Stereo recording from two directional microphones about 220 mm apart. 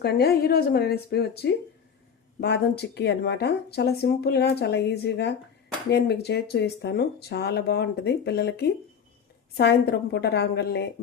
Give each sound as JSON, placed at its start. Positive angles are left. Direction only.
{"t": 0.0, "sound": "speech", "side_deg": 45}